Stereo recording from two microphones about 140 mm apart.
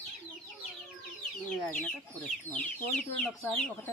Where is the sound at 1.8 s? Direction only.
10° left (ahead or behind).